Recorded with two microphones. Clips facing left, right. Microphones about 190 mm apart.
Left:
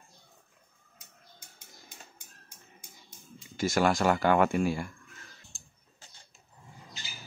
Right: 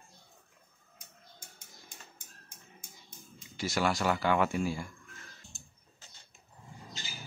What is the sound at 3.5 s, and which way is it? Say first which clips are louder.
Speech: left 5 dB; 50° left (ahead or behind).